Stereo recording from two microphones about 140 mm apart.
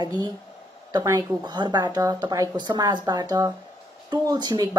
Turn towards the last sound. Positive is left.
turn(degrees=-30)  # may be behind; listen again after turning